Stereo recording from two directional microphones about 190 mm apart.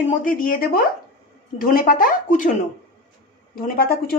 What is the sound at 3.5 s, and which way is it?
Speech, 50° left (ahead or behind).